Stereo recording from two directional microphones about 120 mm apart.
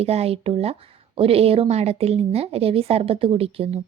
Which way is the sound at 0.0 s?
60° right (ahead or behind).